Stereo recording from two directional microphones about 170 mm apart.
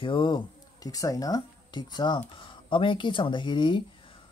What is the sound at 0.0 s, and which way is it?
Speech, 30° left (ahead or behind).